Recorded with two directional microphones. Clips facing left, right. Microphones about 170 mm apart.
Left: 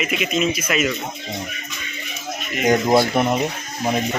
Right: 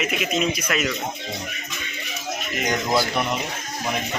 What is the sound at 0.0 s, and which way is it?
Speech, centre (ahead or behind).